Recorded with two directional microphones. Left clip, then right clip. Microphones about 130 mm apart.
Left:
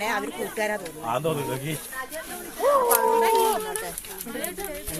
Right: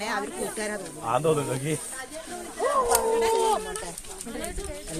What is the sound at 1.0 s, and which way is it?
Speech, 90° right.